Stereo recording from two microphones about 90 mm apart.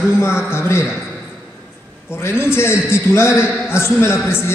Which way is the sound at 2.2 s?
25° left (ahead or behind).